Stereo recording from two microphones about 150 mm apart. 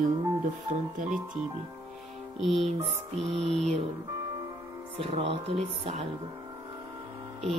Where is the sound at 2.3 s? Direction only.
Centre (ahead or behind).